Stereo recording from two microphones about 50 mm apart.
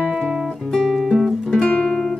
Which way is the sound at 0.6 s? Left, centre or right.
Centre.